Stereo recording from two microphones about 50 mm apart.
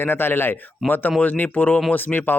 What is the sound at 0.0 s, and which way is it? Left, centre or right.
Speech, left.